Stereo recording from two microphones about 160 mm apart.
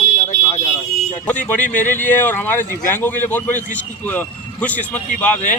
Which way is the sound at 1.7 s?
10° left (ahead or behind).